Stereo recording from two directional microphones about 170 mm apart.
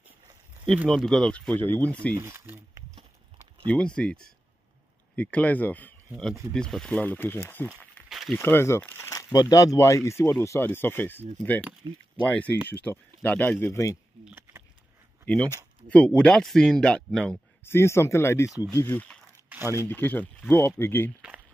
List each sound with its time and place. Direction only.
0.8 s speech: centre (ahead or behind)
2.1 s speech: 15° right (ahead or behind)
3.6 s speech: 5° left (ahead or behind)
7.8 s a sound: 5° left (ahead or behind)
8.4 s speech: 15° left (ahead or behind)
11.8 s speech: 25° right (ahead or behind)
12.2 s speech: 10° left (ahead or behind)
14.2 s a sound: 15° right (ahead or behind)
15.2 s speech: 10° left (ahead or behind)
17.6 s speech: 15° left (ahead or behind)
19.5 s speech: 10° right (ahead or behind)
19.9 s speech: 10° left (ahead or behind)